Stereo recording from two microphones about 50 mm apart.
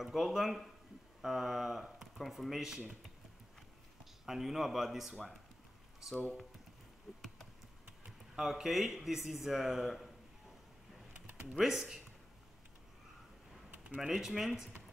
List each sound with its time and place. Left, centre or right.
0.0 s speech: centre
4.0 s speech: centre
5.1 s speech: centre
7.1 s computer keyboard: centre
8.4 s speech: centre
11.5 s speech: centre
13.7 s a sound: right
14.0 s speech: centre